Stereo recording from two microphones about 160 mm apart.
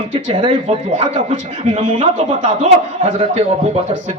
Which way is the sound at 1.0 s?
45° right (ahead or behind).